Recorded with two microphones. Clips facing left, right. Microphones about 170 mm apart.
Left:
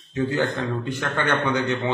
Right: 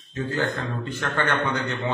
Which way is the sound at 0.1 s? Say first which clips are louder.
Left 3 dB; 15° left (ahead or behind).